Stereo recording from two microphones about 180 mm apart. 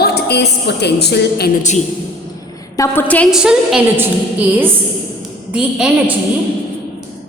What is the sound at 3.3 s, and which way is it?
A woman's voice, 5° right (ahead or behind).